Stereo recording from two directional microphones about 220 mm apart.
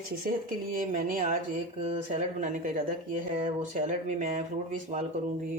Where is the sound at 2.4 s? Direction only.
35° right (ahead or behind).